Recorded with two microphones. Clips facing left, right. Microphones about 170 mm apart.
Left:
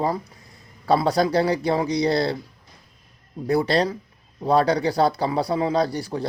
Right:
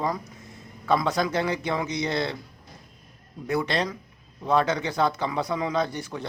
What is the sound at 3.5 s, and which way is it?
Speech, 35° left (ahead or behind).